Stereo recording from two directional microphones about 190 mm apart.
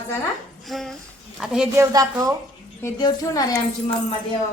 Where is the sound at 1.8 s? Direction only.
15° right (ahead or behind).